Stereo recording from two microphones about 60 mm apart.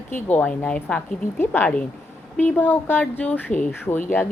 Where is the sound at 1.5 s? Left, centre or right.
Left.